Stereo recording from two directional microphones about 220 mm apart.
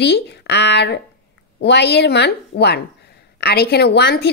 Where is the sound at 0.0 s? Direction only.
50° left (ahead or behind).